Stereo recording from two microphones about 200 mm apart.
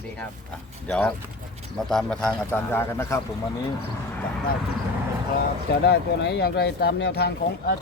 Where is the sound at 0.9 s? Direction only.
5° left (ahead or behind).